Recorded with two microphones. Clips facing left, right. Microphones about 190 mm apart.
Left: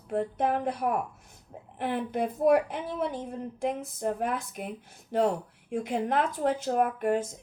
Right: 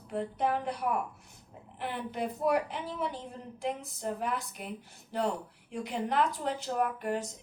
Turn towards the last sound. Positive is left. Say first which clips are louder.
# left 5 dB
turn(degrees=50)  # may be behind; listen again after turning